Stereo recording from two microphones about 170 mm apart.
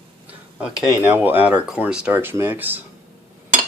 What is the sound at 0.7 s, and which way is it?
Speech, 20° left (ahead or behind).